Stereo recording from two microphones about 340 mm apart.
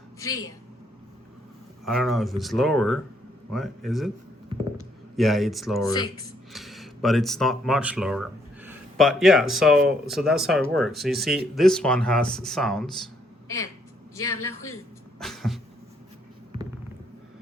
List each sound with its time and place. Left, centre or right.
0.2 s a woman's voice: centre
1.8 s speech: centre
5.1 s speech: centre
14.2 s a man's voice: left
15.2 s vehicle: centre